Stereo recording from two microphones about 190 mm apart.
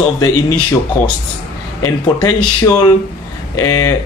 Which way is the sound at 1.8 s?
20° left (ahead or behind).